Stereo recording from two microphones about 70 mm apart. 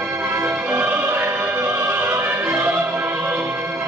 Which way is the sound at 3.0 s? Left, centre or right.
Right.